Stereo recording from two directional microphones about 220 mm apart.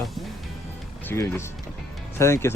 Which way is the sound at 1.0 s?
10° left (ahead or behind).